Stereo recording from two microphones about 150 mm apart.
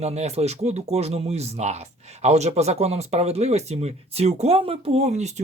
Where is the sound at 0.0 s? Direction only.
45° right (ahead or behind).